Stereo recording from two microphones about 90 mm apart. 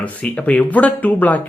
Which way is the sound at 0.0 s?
15° left (ahead or behind).